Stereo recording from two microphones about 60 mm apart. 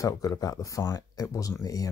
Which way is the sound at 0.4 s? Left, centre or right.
Left.